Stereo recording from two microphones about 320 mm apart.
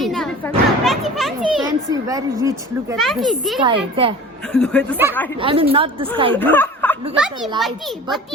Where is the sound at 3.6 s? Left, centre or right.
Centre.